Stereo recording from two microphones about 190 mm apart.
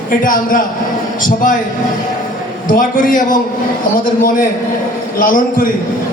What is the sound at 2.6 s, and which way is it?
A man's voice, 45° left (ahead or behind).